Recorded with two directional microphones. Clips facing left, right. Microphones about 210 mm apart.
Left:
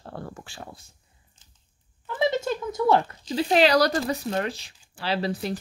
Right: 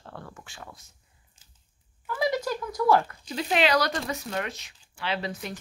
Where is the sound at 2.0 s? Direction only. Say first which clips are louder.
Left 3 dB; 25° left (ahead or behind).